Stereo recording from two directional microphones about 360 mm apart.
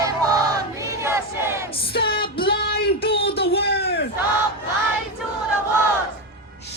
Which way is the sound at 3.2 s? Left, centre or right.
Left.